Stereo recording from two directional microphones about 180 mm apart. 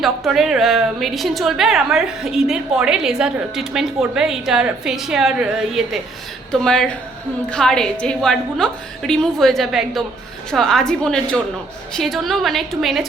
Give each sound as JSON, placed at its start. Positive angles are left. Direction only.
{"t": 0.0, "sound": "a woman's voice", "side_deg": 0}